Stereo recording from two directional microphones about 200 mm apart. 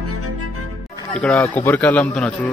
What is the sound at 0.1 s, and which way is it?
Music, 90° right.